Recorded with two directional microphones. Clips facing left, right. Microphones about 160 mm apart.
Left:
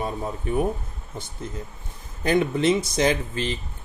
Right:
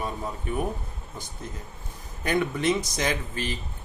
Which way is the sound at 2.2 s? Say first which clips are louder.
Left 4 dB; 25° left (ahead or behind).